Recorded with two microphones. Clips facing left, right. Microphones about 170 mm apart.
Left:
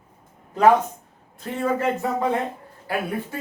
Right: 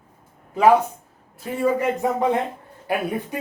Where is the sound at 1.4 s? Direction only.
10° right (ahead or behind).